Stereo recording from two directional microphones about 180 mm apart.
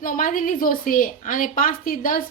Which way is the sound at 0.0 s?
50° left (ahead or behind).